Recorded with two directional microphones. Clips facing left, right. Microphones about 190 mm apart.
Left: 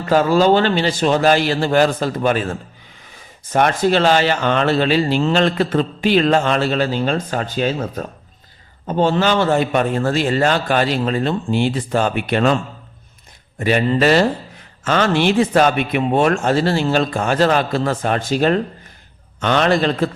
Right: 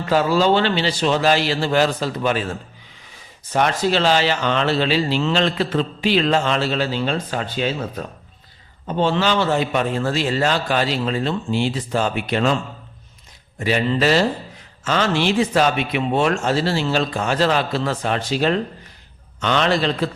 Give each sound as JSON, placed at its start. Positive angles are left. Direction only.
{"t": 0.1, "sound": "speech", "side_deg": 45}
{"t": 3.5, "sound": "speech", "side_deg": 50}
{"t": 13.6, "sound": "speech", "side_deg": 55}